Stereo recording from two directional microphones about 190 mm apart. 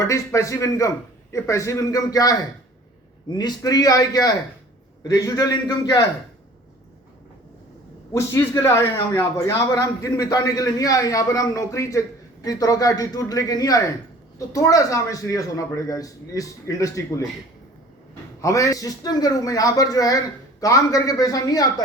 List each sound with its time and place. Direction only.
0.0 s a man's voice: 15° left (ahead or behind)
8.1 s a man's voice: 15° left (ahead or behind)
18.4 s a man's voice: 15° left (ahead or behind)